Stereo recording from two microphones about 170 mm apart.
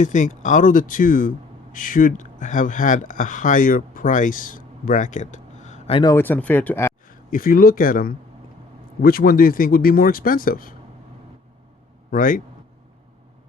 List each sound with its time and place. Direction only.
0.0 s speech: 45° left (ahead or behind)
6.0 s speech: 15° left (ahead or behind)
7.1 s a man's voice: 55° left (ahead or behind)
12.1 s speech: 55° left (ahead or behind)